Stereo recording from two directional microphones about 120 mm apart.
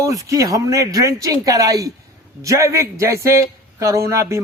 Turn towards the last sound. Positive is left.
turn(degrees=-25)  # may be behind; listen again after turning